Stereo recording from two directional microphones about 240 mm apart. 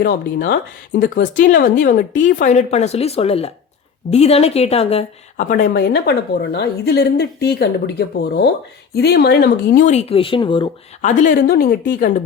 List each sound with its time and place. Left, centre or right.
0.0 s a woman's voice: left